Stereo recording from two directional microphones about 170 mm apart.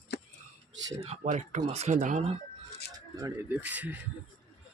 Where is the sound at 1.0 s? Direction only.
40° right (ahead or behind).